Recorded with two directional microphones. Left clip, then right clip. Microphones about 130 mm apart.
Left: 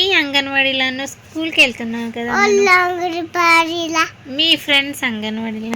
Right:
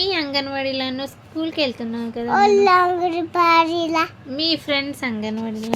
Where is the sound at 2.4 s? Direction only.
35° right (ahead or behind).